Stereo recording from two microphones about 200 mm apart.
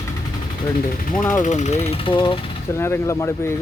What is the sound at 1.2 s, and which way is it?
Speech, 5° left (ahead or behind).